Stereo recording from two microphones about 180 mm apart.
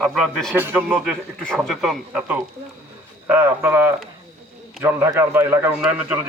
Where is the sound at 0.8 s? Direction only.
15° right (ahead or behind).